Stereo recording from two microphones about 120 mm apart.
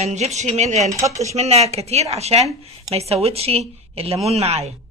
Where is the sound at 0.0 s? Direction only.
65° right (ahead or behind).